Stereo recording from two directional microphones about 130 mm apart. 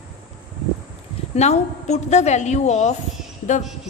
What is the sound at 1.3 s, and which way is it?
A woman's voice, 60° left (ahead or behind).